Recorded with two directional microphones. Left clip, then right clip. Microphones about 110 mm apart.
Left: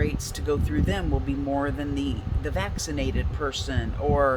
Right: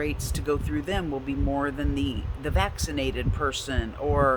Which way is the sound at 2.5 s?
35° right (ahead or behind).